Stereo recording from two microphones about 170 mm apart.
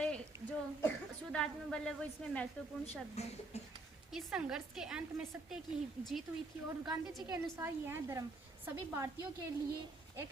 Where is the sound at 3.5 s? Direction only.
40° left (ahead or behind).